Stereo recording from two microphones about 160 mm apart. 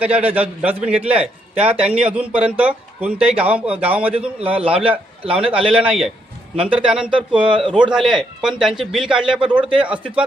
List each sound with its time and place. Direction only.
0.0 s a man's voice: 10° right (ahead or behind)
4.7 s a man's voice: 35° right (ahead or behind)
5.7 s a man's voice: 5° right (ahead or behind)
7.4 s a man's voice: 30° right (ahead or behind)
7.9 s a man's voice: centre (ahead or behind)